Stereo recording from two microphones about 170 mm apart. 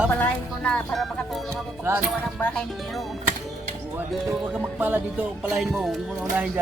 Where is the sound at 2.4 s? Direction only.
5° left (ahead or behind).